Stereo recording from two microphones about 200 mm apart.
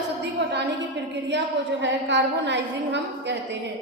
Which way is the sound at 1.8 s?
60° right (ahead or behind).